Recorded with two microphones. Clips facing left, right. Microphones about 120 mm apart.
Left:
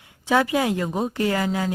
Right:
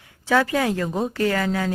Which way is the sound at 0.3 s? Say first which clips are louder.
Even; 20° left (ahead or behind).